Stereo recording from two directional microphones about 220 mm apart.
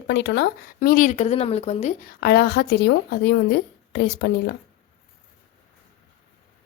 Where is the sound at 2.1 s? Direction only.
50° left (ahead or behind).